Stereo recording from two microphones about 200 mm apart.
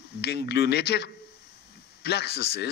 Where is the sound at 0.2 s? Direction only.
55° left (ahead or behind).